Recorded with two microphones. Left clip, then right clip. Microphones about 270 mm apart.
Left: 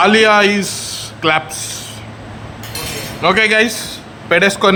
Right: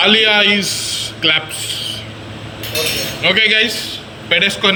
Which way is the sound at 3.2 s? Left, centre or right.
Centre.